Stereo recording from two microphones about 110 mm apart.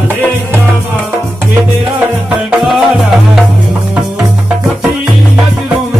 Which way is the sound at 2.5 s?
5° right (ahead or behind).